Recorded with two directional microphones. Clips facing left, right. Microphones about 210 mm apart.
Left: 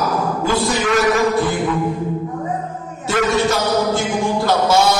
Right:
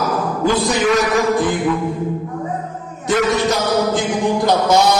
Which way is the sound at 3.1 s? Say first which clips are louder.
Right 1 dB; 15° right (ahead or behind).